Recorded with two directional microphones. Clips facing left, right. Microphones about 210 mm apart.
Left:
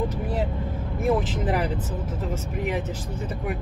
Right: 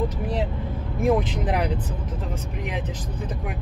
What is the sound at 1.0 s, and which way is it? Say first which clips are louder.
Speech: right 2 dB; 5° left (ahead or behind).